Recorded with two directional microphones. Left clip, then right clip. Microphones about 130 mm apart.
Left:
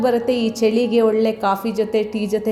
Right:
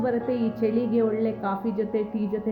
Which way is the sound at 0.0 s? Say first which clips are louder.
Left 8 dB; 25° left (ahead or behind).